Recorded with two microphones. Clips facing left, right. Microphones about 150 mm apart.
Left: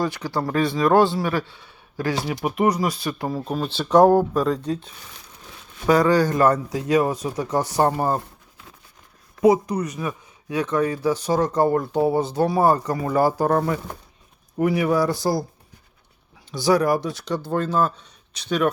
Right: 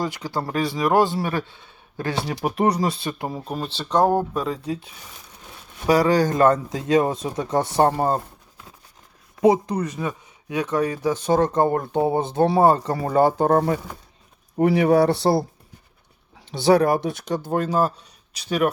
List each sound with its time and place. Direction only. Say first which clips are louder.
0.0 s speech: left 2 dB; 15° right (ahead or behind)
1.5 s a sound: left 2 dB; 20° right (ahead or behind)
2.2 s speech: right 1 dB; 35° right (ahead or behind)
3.4 s speech: left 3 dB; centre (ahead or behind)
5.9 s speech: even; 15° right (ahead or behind)
9.4 s speech: even; 30° right (ahead or behind)
14.8 s a man's voice: right 4 dB; 65° right (ahead or behind)
16.5 s speech: right 2 dB; 60° right (ahead or behind)
17.5 s speech: right 1 dB; 10° right (ahead or behind)